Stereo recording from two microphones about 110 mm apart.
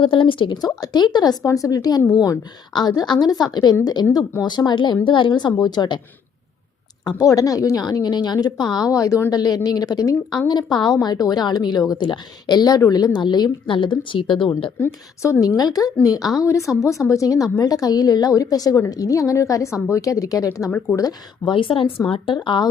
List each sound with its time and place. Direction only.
0.0 s a woman's voice: 50° left (ahead or behind)
7.0 s a woman's voice: 35° left (ahead or behind)
14.8 s a woman's voice: 25° left (ahead or behind)
21.4 s speech: 50° left (ahead or behind)